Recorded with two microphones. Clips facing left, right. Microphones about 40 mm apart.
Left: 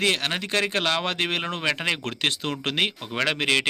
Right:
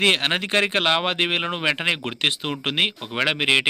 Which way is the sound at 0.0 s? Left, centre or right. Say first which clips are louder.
Right 4 dB; right.